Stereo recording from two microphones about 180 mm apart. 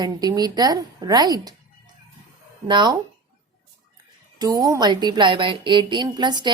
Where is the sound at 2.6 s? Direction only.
25° right (ahead or behind).